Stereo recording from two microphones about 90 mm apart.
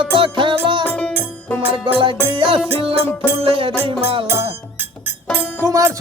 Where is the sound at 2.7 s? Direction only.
90° right.